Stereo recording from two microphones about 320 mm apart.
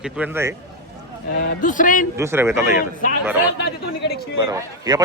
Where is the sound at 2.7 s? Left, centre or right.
Left.